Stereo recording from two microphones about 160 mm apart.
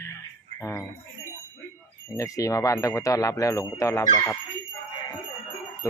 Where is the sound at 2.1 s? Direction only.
20° left (ahead or behind).